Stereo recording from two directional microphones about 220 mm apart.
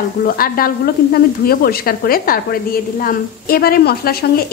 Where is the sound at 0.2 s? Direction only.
40° left (ahead or behind).